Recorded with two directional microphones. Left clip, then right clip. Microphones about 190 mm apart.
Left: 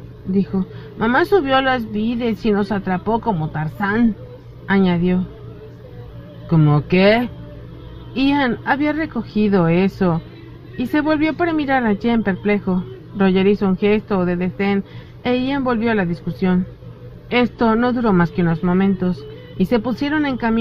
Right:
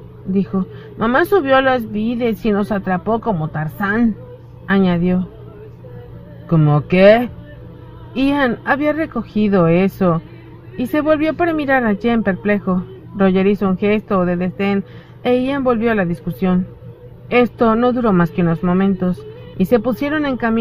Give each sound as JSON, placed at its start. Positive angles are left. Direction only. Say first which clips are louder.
{"t": 0.3, "sound": "speech", "louder": "right 1 dB", "side_deg": -35}
{"t": 3.2, "sound": "speech", "louder": "right 1 dB", "side_deg": -15}
{"t": 3.5, "sound": "speech", "louder": "right 1 dB", "side_deg": -30}
{"t": 6.7, "sound": "speech", "louder": "right 5 dB", "side_deg": -30}